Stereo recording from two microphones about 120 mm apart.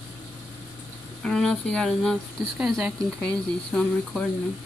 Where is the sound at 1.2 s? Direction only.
5° left (ahead or behind).